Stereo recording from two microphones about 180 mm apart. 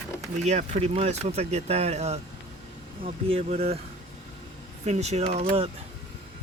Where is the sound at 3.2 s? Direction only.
35° right (ahead or behind).